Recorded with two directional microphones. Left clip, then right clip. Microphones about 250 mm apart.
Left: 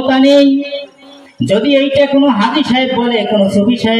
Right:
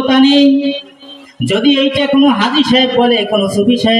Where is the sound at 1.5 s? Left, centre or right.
Right.